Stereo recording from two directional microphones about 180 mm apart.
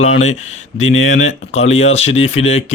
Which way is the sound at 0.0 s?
40° left (ahead or behind).